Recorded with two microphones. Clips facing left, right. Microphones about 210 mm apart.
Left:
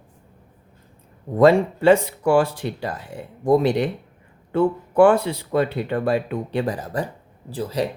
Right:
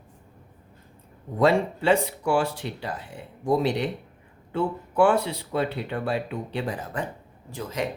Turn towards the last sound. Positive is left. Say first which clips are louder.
# left 6 dB
turn(degrees=35)  # may be behind; listen again after turning